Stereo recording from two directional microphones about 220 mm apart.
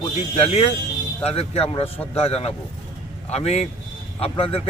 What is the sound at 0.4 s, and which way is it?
Speech, 25° left (ahead or behind).